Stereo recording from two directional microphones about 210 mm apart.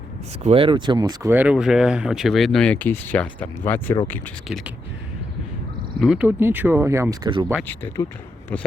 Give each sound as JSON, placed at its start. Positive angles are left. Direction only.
{"t": 0.4, "sound": "speech", "side_deg": -25}
{"t": 6.0, "sound": "speech", "side_deg": -5}
{"t": 8.0, "sound": "speech", "side_deg": 20}